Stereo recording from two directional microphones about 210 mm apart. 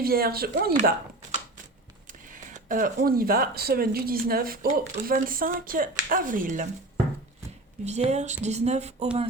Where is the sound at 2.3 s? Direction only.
40° right (ahead or behind).